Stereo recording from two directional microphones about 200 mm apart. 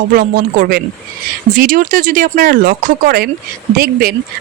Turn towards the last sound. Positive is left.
turn(degrees=-45)  # may be behind; listen again after turning